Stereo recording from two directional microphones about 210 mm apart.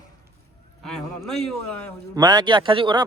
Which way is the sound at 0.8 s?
Centre (ahead or behind).